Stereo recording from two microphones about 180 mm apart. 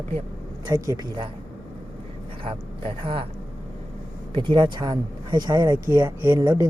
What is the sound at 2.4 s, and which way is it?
Speech, 30° right (ahead or behind).